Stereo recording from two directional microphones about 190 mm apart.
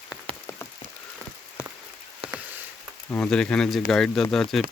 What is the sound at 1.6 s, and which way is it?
Rain on surface, 15° left (ahead or behind).